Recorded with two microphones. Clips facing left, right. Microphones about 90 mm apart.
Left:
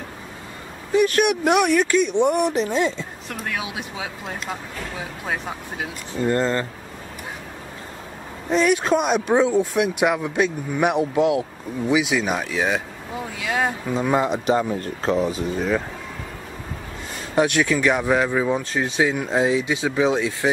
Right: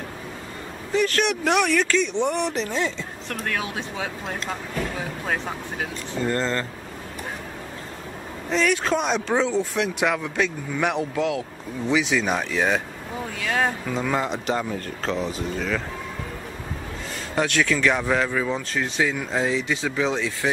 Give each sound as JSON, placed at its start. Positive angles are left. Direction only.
{"t": 0.9, "sound": "speech", "side_deg": 15}
{"t": 6.2, "sound": "speech", "side_deg": 15}
{"t": 8.5, "sound": "speech", "side_deg": 15}
{"t": 13.8, "sound": "speech", "side_deg": 20}
{"t": 17.4, "sound": "speech", "side_deg": 15}